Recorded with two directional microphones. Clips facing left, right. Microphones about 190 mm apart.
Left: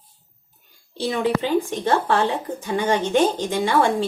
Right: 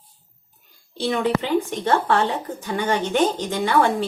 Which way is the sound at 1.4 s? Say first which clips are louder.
Left 1 dB; 20° left (ahead or behind).